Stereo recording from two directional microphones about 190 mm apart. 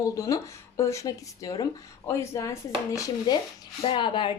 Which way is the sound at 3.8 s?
25° left (ahead or behind).